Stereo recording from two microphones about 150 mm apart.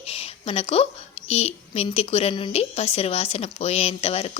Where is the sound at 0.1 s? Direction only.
40° left (ahead or behind).